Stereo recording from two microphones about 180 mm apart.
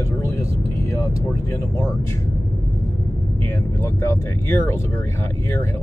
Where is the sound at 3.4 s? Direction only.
15° left (ahead or behind).